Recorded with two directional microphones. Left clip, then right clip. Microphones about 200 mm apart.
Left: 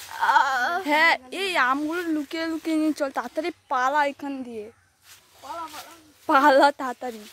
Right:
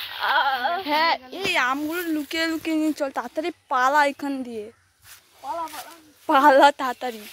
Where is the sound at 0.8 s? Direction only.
35° left (ahead or behind).